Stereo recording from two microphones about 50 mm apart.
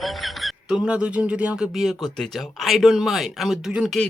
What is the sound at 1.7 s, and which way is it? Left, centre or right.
Speech, centre.